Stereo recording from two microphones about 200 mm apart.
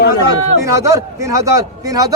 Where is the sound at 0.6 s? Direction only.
15° right (ahead or behind).